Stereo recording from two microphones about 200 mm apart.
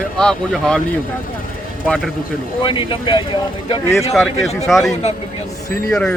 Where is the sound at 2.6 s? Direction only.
25° left (ahead or behind).